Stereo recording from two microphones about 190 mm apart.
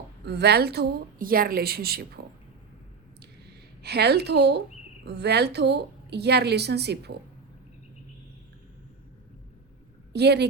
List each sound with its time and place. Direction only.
0.3 s a woman's voice: 60° right (ahead or behind)
3.8 s a woman's voice: 60° right (ahead or behind)
10.1 s a woman's voice: 60° right (ahead or behind)